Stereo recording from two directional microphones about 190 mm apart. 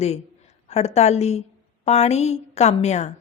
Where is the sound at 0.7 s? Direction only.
35° left (ahead or behind).